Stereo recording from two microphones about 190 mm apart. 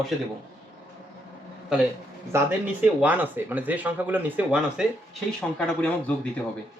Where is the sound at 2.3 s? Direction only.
10° right (ahead or behind).